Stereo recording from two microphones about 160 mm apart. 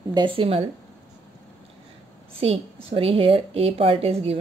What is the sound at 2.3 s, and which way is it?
A woman's voice, 35° right (ahead or behind).